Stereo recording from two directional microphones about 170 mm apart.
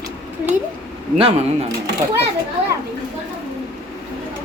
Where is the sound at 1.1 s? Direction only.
35° right (ahead or behind).